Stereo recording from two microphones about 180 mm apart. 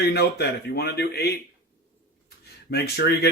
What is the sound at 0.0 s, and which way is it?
Speech, 65° left (ahead or behind).